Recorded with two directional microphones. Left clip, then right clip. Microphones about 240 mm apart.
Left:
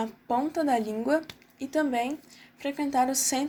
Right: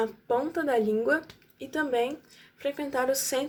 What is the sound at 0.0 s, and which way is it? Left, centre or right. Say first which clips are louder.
A woman's voice: right 1 dB; left.